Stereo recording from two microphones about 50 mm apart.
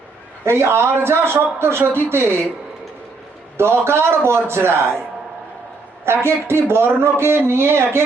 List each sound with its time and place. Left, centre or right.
0.4 s a man's voice: right
3.6 s a man's voice: right
6.1 s a man's voice: right